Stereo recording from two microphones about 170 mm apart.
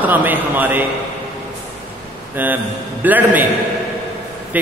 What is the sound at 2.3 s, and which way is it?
A man's voice, 10° right (ahead or behind).